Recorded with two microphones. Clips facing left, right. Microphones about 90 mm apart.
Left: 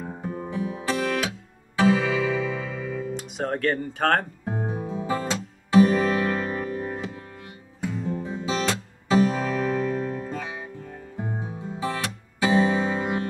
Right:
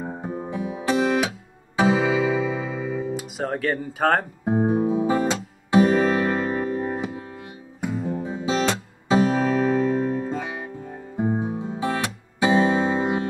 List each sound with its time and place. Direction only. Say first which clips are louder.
0.0 s music: right 2 dB; 20° right (ahead or behind)
3.2 s speech: right 1 dB; 5° right (ahead or behind)
4.5 s music: right 14 dB; 25° right (ahead or behind)